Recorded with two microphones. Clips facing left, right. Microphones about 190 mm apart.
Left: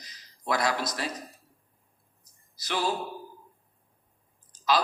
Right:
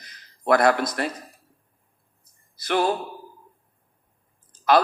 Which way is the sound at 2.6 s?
55° right (ahead or behind).